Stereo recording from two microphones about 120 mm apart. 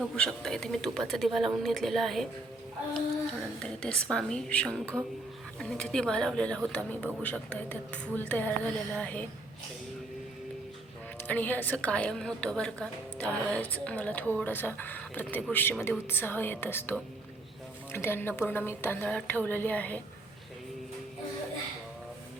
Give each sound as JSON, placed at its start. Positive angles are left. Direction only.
{"t": 0.2, "sound": "speech", "side_deg": 5}
{"t": 3.6, "sound": "a woman's voice", "side_deg": 10}
{"t": 11.2, "sound": "a woman's voice", "side_deg": 15}